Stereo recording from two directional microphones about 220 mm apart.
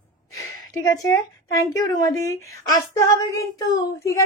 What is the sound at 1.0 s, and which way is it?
Speech, 15° left (ahead or behind).